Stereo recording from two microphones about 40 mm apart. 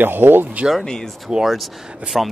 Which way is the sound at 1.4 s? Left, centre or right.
Centre.